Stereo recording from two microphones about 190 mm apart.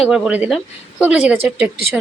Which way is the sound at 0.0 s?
5° right (ahead or behind).